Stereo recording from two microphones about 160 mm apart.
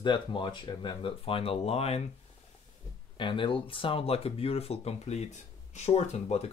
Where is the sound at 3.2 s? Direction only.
30° left (ahead or behind).